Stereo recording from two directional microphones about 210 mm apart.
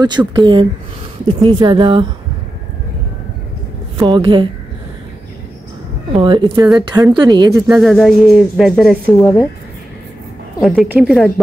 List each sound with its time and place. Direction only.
0.0 s speech: 20° right (ahead or behind)
4.0 s speech: 20° right (ahead or behind)
6.1 s speech: 25° right (ahead or behind)
7.6 s speech: centre (ahead or behind)
10.6 s speech: 5° right (ahead or behind)